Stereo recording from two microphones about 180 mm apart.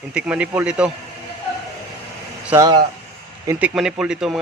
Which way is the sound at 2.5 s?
20° right (ahead or behind).